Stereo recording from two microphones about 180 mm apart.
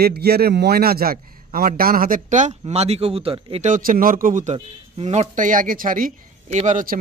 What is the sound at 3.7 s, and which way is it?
Speech, 50° right (ahead or behind).